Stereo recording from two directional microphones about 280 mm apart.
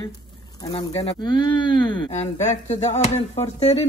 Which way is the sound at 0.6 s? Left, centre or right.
Centre.